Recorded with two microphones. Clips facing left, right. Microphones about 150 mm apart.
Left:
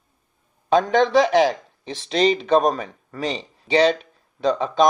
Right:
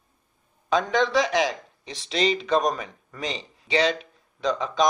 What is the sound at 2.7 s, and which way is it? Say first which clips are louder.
Speech: left 4 dB; 35° left (ahead or behind).